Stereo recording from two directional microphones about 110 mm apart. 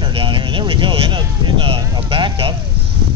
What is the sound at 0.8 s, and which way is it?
Speech, 45° right (ahead or behind).